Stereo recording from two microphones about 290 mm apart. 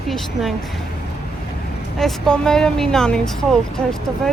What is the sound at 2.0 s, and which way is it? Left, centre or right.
Speech, centre.